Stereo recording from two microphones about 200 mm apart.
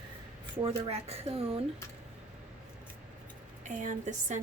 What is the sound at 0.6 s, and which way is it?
Speech, 30° right (ahead or behind).